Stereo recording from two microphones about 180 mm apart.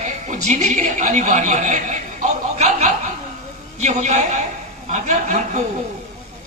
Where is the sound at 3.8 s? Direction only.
40° right (ahead or behind).